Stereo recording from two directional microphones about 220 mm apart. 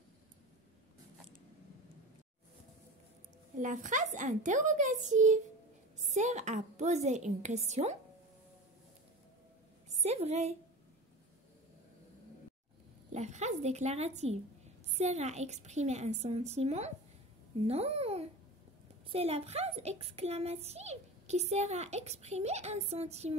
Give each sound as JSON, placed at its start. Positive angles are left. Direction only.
{"t": 3.5, "sound": "a woman's voice", "side_deg": -35}
{"t": 9.8, "sound": "a woman's voice", "side_deg": -30}
{"t": 13.1, "sound": "a woman's voice", "side_deg": -30}